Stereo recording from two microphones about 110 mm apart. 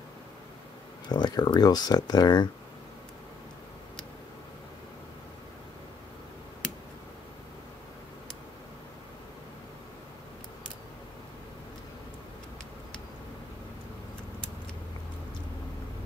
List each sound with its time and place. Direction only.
1.0 s speech: 40° left (ahead or behind)